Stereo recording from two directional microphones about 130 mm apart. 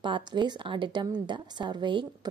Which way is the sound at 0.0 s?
35° right (ahead or behind).